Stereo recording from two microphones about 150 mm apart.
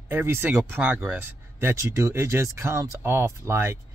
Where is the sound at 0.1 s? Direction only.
15° right (ahead or behind).